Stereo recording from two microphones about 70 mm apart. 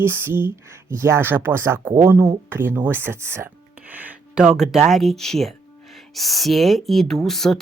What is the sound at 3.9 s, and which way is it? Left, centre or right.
Music, right.